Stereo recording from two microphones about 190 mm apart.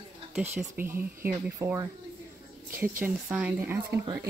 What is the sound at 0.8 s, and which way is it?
Speech, 10° right (ahead or behind).